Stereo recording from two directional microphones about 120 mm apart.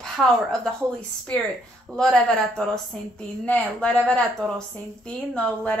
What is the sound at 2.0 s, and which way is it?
Speech, 5° left (ahead or behind).